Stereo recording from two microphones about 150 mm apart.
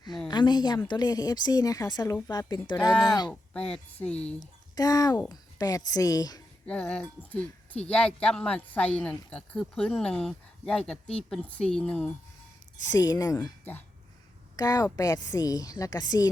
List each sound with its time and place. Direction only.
0.3 s a woman's voice: 30° left (ahead or behind)
3.5 s speech: 5° left (ahead or behind)
4.4 s a woman's voice: 25° left (ahead or behind)
6.7 s speech: 10° left (ahead or behind)
12.9 s a woman's voice: 25° left (ahead or behind)
14.5 s a woman's voice: 25° left (ahead or behind)